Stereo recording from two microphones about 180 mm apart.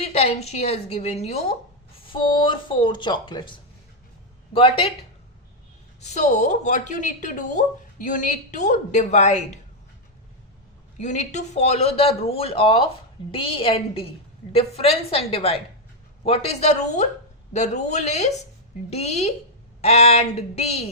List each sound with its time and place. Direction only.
0.0 s speech: 35° left (ahead or behind)
6.0 s speech: 40° left (ahead or behind)
10.9 s speech: 40° left (ahead or behind)